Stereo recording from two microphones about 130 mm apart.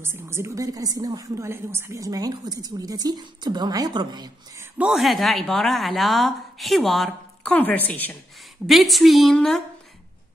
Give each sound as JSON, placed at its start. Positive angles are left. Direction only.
{"t": 0.0, "sound": "speech", "side_deg": -20}
{"t": 4.8, "sound": "a woman's voice", "side_deg": 0}
{"t": 7.4, "sound": "a woman's voice", "side_deg": 15}
{"t": 8.6, "sound": "a woman's voice", "side_deg": 0}